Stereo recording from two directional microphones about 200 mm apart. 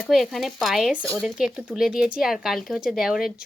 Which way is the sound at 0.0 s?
Centre (ahead or behind).